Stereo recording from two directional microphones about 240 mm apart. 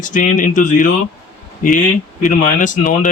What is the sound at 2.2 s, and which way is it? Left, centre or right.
Speech, left.